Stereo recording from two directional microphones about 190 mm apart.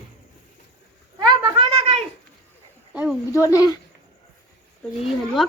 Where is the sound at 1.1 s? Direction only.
25° right (ahead or behind).